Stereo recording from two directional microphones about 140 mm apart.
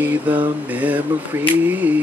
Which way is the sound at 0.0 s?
10° right (ahead or behind).